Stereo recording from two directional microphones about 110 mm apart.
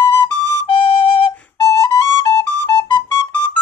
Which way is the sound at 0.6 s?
55° left (ahead or behind).